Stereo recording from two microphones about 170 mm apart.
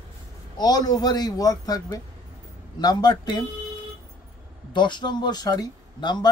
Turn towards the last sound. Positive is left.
turn(degrees=25)  # may be behind; listen again after turning